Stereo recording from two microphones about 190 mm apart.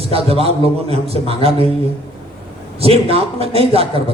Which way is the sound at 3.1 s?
30° right (ahead or behind).